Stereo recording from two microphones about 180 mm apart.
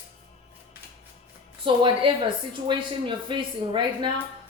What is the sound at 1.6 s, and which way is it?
Speech, 30° right (ahead or behind).